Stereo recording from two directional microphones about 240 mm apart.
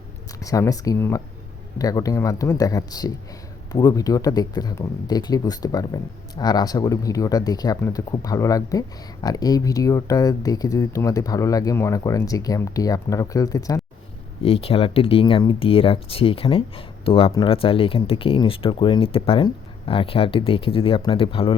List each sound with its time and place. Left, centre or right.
0.4 s speech: centre